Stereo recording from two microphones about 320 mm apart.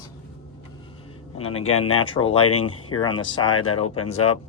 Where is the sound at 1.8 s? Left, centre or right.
Left.